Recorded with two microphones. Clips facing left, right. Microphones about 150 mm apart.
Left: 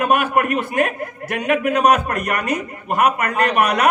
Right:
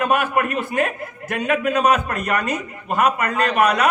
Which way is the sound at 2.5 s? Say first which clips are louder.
Left 2 dB; 55° left (ahead or behind).